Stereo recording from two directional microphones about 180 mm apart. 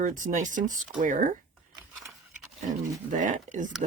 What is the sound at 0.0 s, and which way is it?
Speech, 45° right (ahead or behind).